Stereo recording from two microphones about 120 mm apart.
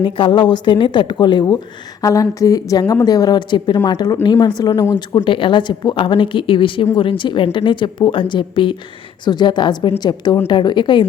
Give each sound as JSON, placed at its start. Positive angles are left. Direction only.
{"t": 0.0, "sound": "a woman's voice", "side_deg": 40}
{"t": 2.0, "sound": "a woman's voice", "side_deg": 30}
{"t": 4.9, "sound": "a woman's voice", "side_deg": 40}